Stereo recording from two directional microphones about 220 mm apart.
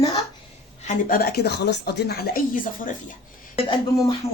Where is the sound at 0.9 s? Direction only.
40° left (ahead or behind).